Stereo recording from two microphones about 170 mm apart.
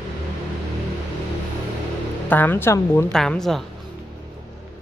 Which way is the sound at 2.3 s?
10° left (ahead or behind).